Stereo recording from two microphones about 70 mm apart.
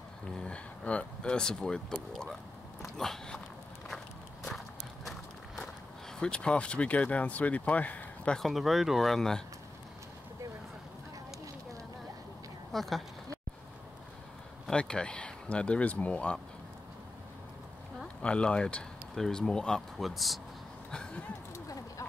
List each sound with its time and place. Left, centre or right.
0.3 s speech: centre
6.1 s speech: centre
8.4 s speech: centre
12.7 s speech: centre
14.7 s speech: centre
18.2 s speech: centre
20.9 s a sound: centre